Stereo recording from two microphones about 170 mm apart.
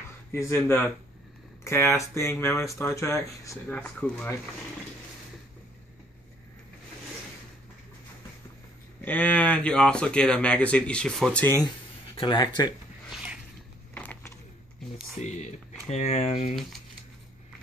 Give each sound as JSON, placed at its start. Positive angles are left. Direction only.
{"t": 0.3, "sound": "speech", "side_deg": 15}
{"t": 9.0, "sound": "speech", "side_deg": 10}
{"t": 12.2, "sound": "speech", "side_deg": 25}
{"t": 13.9, "sound": "a sound", "side_deg": 10}
{"t": 15.2, "sound": "speech", "side_deg": 45}